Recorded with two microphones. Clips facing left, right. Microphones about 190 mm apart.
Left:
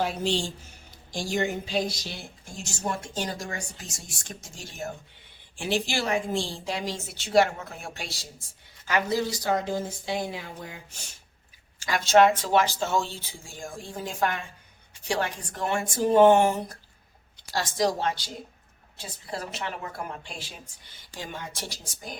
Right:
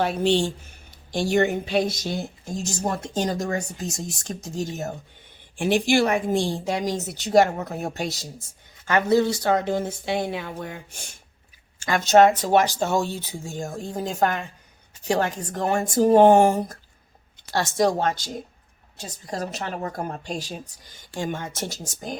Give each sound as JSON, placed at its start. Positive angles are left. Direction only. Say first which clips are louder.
{"t": 0.0, "sound": "a woman's voice", "louder": "right 6 dB", "side_deg": -60}
{"t": 5.5, "sound": "a woman's voice", "louder": "right 8 dB", "side_deg": -55}
{"t": 8.9, "sound": "a woman's voice", "louder": "right 7 dB", "side_deg": -55}
{"t": 11.9, "sound": "a woman's voice", "louder": "right 3 dB", "side_deg": -45}
{"t": 17.5, "sound": "a woman's voice", "louder": "right 5 dB", "side_deg": -60}